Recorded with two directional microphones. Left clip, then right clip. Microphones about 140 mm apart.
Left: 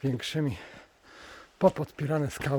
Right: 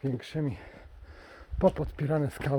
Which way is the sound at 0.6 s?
30° left (ahead or behind).